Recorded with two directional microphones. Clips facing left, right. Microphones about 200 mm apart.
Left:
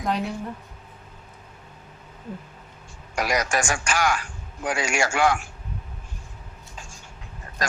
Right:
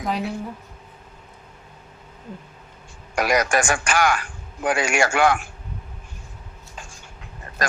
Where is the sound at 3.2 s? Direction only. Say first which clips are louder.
Right 4 dB; 60° right (ahead or behind).